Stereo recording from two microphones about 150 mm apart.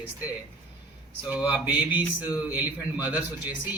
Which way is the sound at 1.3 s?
10° right (ahead or behind).